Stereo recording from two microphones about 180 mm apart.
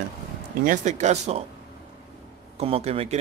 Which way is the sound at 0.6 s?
45° right (ahead or behind).